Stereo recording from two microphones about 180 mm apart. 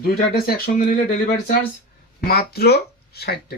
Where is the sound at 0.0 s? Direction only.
55° left (ahead or behind).